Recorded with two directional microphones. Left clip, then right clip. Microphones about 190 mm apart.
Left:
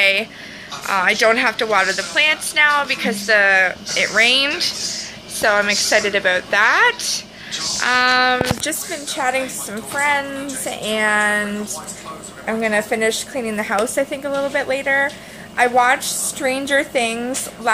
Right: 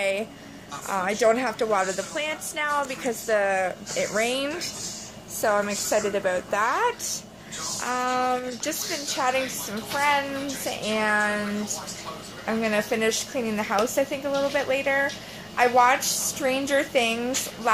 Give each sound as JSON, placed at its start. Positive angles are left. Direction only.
{"t": 0.0, "sound": "a sound", "side_deg": -10}
{"t": 0.8, "sound": "a woman's voice", "side_deg": -5}
{"t": 8.6, "sound": "a woman's voice", "side_deg": 5}
{"t": 12.4, "sound": "a woman's voice", "side_deg": 0}
{"t": 16.0, "sound": "a woman's voice", "side_deg": 25}
{"t": 16.3, "sound": "a woman's voice", "side_deg": 5}